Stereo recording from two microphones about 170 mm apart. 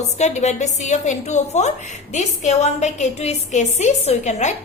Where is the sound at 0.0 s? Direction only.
40° left (ahead or behind).